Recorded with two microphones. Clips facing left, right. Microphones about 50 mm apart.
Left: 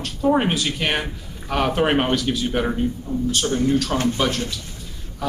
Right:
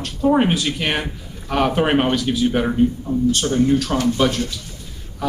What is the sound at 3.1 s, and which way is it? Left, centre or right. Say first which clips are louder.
Speech: right 4 dB; right.